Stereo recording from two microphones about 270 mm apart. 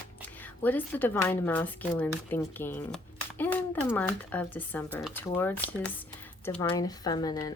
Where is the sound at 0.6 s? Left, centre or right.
Centre.